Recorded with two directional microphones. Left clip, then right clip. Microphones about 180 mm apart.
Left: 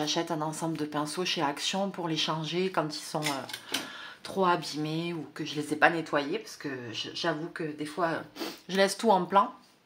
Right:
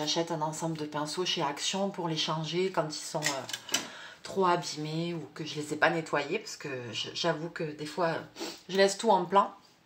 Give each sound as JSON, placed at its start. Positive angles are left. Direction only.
{"t": 0.0, "sound": "speech", "side_deg": 35}
{"t": 4.3, "sound": "speech", "side_deg": 35}
{"t": 8.4, "sound": "speech", "side_deg": 40}